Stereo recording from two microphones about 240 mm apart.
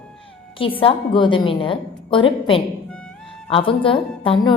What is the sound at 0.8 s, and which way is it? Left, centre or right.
A woman's voice, left.